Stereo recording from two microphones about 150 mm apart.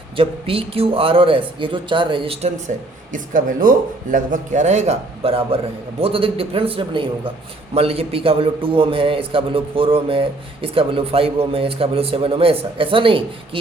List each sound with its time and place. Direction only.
0.2 s a man's voice: 35° right (ahead or behind)